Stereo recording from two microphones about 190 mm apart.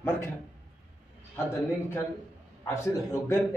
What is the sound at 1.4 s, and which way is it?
Speech, 15° left (ahead or behind).